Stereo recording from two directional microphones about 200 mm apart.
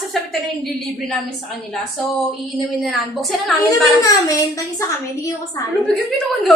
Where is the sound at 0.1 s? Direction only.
Centre (ahead or behind).